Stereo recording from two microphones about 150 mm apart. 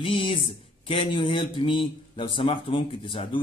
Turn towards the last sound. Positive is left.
turn(degrees=35)  # may be behind; listen again after turning